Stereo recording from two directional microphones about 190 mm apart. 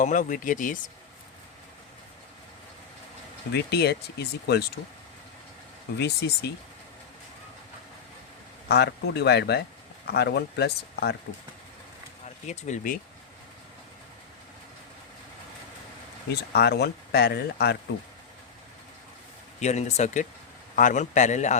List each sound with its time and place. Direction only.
0.0 s speech: 45° left (ahead or behind)
3.5 s speech: 60° left (ahead or behind)
6.0 s speech: 60° left (ahead or behind)
8.6 s speech: 60° left (ahead or behind)
12.5 s a man's voice: 40° left (ahead or behind)
16.5 s speech: 60° left (ahead or behind)
19.5 s a man's voice: 35° left (ahead or behind)